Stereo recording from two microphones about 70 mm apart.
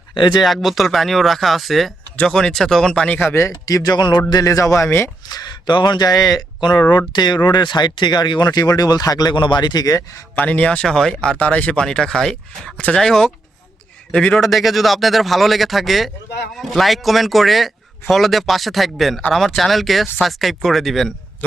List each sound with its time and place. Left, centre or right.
0.4 s speech: centre
3.3 s speech: left
3.9 s speech: left
4.4 s a man's voice: left
5.3 s speech: left
10.3 s speech: left; by 13.3 s centre
14.1 s speech: centre
14.3 s speech: centre